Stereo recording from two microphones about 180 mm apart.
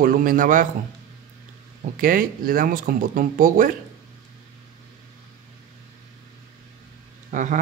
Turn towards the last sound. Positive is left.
turn(degrees=-45)  # may be behind; listen again after turning